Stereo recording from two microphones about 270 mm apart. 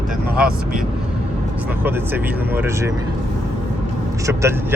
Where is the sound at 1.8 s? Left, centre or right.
Centre.